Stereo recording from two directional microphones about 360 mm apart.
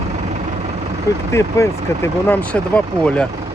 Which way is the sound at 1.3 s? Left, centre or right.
Centre.